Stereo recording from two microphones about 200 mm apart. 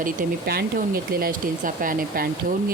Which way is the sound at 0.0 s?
45° right (ahead or behind).